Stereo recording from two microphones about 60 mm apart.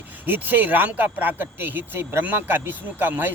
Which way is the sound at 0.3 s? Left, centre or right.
Right.